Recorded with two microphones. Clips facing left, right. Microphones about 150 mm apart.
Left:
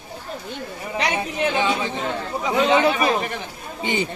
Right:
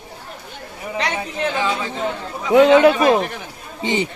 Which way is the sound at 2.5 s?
80° right.